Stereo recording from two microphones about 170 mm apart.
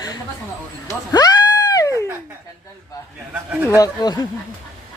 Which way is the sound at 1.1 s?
25° left (ahead or behind).